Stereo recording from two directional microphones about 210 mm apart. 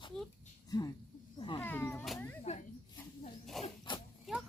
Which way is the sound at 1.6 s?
10° left (ahead or behind).